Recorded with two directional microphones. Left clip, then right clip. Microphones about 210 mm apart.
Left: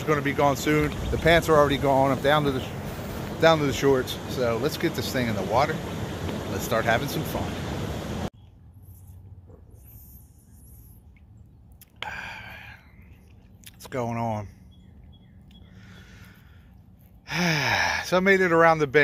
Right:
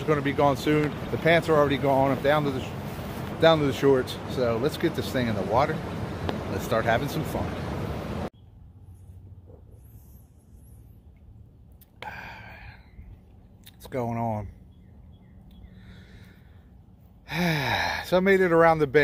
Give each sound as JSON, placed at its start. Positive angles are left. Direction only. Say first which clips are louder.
{"t": 0.0, "sound": "speech", "louder": "even", "side_deg": 0}
{"t": 1.2, "sound": "speech", "louder": "left 2 dB", "side_deg": 20}
{"t": 3.3, "sound": "speech", "louder": "even", "side_deg": 0}
{"t": 5.8, "sound": "vehicle", "louder": "left 1 dB", "side_deg": 50}
{"t": 6.7, "sound": "speech", "louder": "left 1 dB", "side_deg": 0}
{"t": 7.0, "sound": "a sound", "louder": "even", "side_deg": 50}
{"t": 12.0, "sound": "whispering", "louder": "left 4 dB", "side_deg": 0}
{"t": 13.7, "sound": "speech", "louder": "left 1 dB", "side_deg": 0}
{"t": 15.8, "sound": "a sound", "louder": "left 3 dB", "side_deg": -5}
{"t": 17.3, "sound": "speech", "louder": "left 2 dB", "side_deg": -5}